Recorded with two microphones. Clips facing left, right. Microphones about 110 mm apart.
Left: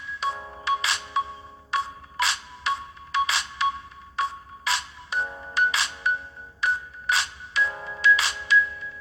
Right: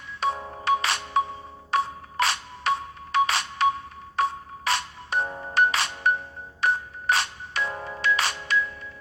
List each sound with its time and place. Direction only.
0.2 s music: 50° right (ahead or behind)